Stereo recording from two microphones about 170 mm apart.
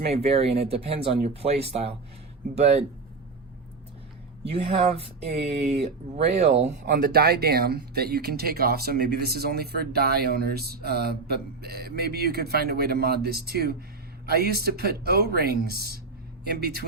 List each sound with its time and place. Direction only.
0.1 s speech: 35° right (ahead or behind)
4.4 s speech: 35° right (ahead or behind)
6.8 s speech: 70° right (ahead or behind)